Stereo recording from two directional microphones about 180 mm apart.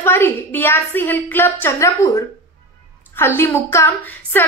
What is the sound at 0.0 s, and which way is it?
A woman's voice, 10° left (ahead or behind).